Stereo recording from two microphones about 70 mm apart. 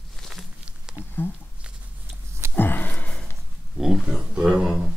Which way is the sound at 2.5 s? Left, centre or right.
Left.